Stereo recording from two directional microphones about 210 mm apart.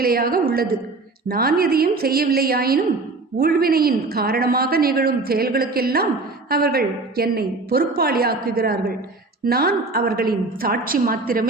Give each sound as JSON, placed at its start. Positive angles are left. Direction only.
{"t": 0.0, "sound": "a woman's voice", "side_deg": -45}